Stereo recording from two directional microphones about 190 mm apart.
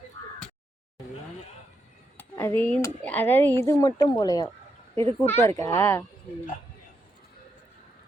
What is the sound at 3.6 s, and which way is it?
Speech, 20° left (ahead or behind).